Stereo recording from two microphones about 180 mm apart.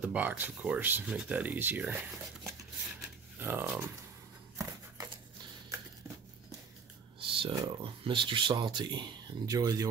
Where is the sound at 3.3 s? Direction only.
10° right (ahead or behind).